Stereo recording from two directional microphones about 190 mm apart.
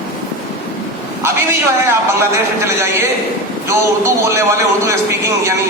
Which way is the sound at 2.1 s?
15° right (ahead or behind).